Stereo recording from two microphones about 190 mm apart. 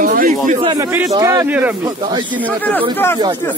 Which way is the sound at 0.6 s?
25° right (ahead or behind).